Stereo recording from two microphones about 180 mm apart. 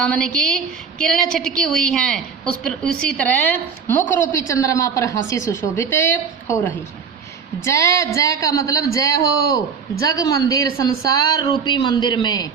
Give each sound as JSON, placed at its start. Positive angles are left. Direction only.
{"t": 0.0, "sound": "a woman's voice", "side_deg": 5}